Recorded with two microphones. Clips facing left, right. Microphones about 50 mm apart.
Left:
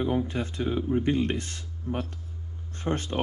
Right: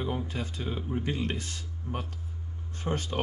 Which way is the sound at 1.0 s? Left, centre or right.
Left.